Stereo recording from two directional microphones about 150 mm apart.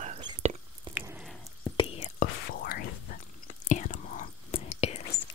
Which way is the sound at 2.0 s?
75° left (ahead or behind).